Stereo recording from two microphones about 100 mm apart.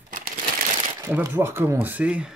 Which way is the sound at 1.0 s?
25° right (ahead or behind).